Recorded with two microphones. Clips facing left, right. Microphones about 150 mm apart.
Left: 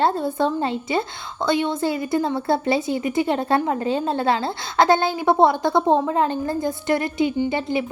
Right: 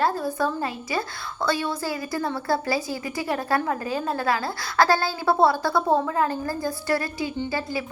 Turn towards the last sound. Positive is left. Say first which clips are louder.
# left 6 dB
turn(degrees=20)  # may be behind; listen again after turning